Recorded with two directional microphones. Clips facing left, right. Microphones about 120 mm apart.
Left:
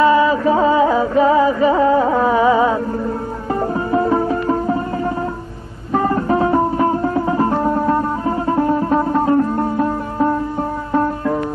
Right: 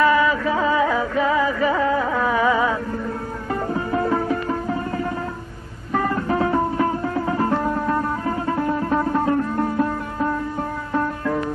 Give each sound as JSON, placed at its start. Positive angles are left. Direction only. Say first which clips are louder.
{"t": 0.0, "sound": "music", "louder": "left 5 dB", "side_deg": 25}
{"t": 5.9, "sound": "music", "louder": "left 5 dB", "side_deg": 30}